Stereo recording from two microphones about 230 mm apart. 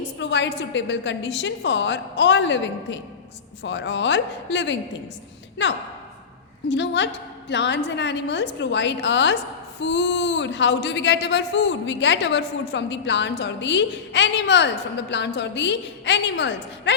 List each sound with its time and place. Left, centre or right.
0.2 s a woman's voice: left
6.7 s a woman's voice: left